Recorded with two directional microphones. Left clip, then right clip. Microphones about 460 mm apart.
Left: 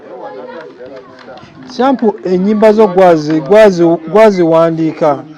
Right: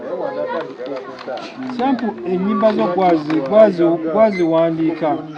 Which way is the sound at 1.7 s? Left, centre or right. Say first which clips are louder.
Left 9 dB; left.